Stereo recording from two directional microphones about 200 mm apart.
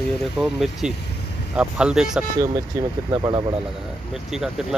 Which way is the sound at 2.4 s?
15° right (ahead or behind).